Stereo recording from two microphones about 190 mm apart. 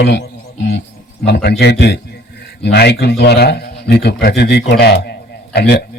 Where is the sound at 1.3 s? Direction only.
60° left (ahead or behind).